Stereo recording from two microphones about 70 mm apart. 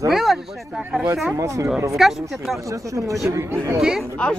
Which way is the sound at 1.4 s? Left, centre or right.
Right.